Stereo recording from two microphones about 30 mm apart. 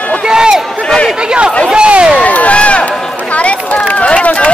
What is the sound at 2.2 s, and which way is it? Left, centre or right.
Crowd, left.